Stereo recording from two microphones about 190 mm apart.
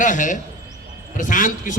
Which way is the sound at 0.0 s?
40° left (ahead or behind).